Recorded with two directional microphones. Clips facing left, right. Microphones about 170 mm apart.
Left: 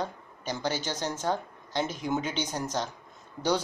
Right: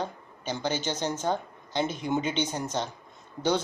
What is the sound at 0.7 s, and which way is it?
Speech, 20° right (ahead or behind).